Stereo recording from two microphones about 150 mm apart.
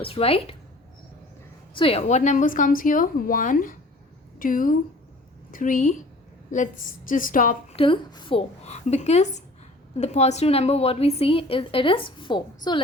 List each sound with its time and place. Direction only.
0.0 s a woman's voice: 40° left (ahead or behind)
1.7 s a woman's voice: 40° left (ahead or behind); by 6.0 s 60° left (ahead or behind)
7.1 s a woman's voice: 65° left (ahead or behind)
7.8 s a woman's voice: 35° left (ahead or behind)
8.6 s a woman's voice: 45° left (ahead or behind)